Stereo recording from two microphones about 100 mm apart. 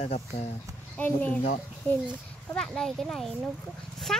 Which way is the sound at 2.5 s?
5° left (ahead or behind).